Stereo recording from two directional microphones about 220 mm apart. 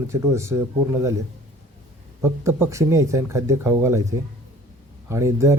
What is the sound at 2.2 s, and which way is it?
Speech, 10° right (ahead or behind).